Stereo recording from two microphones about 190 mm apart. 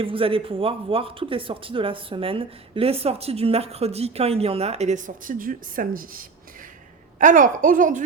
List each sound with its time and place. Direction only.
0.0 s speech: 30° right (ahead or behind)